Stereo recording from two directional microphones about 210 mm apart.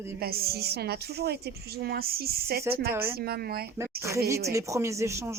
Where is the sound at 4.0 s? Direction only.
15° right (ahead or behind).